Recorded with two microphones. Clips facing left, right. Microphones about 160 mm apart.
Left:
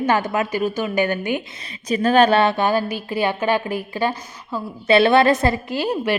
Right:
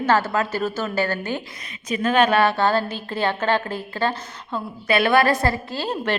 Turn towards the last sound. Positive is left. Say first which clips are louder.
# left 4 dB
turn(degrees=15)  # may be behind; listen again after turning